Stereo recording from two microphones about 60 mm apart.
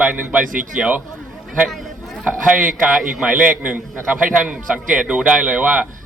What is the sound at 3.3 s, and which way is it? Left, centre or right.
Speech, right.